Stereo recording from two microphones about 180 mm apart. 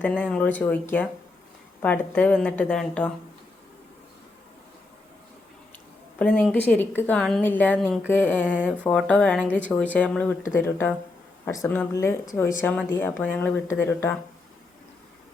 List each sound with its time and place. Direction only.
0.0 s a woman's voice: 5° left (ahead or behind)
6.1 s a woman's voice: 5° left (ahead or behind)